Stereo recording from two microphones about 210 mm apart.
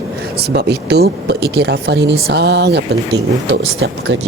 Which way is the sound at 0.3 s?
50° right (ahead or behind).